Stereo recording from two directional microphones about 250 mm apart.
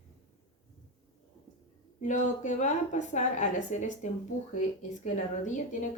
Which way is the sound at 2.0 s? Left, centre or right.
Left.